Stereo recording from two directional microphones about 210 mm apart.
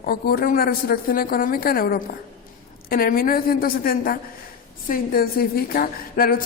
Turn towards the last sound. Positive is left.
turn(degrees=45)  # may be behind; listen again after turning